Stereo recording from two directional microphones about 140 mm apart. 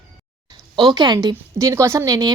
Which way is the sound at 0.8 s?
30° right (ahead or behind).